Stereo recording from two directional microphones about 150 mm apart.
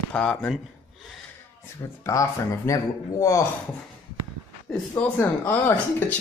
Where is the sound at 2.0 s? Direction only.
20° left (ahead or behind).